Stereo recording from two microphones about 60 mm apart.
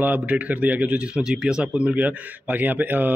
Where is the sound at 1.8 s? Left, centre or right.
Right.